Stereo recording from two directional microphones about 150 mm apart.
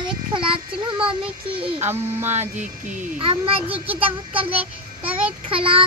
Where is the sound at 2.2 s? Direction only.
50° right (ahead or behind).